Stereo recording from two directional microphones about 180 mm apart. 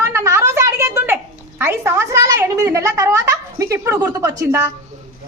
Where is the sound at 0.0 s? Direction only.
15° right (ahead or behind).